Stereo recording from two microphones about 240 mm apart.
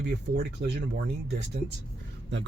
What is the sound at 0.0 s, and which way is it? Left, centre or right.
Speech, right.